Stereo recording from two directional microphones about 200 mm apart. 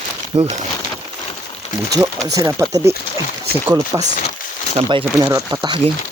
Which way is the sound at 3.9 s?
15° right (ahead or behind).